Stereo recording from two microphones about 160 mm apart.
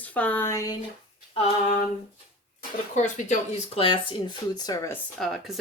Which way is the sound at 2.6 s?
50° left (ahead or behind).